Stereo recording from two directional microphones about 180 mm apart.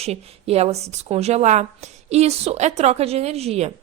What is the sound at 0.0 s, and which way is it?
A woman's voice, 35° right (ahead or behind).